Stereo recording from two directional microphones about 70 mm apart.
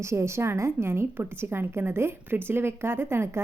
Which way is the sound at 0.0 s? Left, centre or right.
Right.